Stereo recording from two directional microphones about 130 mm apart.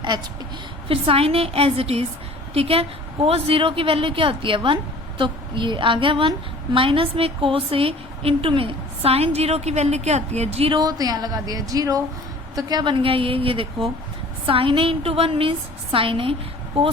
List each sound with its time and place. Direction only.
0.9 s a woman's voice: 45° right (ahead or behind)
10.8 s a woman's voice: 30° right (ahead or behind); by 16.3 s 45° right (ahead or behind)